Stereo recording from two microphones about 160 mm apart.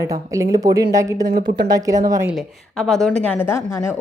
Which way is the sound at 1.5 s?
25° right (ahead or behind).